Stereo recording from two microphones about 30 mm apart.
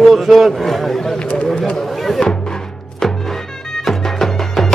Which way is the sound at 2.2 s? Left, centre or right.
Left.